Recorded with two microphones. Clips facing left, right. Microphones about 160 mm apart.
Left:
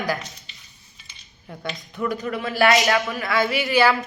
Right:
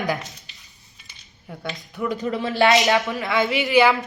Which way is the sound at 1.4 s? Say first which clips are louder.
Even; centre (ahead or behind).